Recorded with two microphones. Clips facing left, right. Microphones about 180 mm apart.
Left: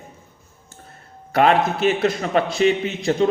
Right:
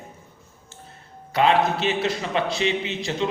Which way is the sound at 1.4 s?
50° left (ahead or behind).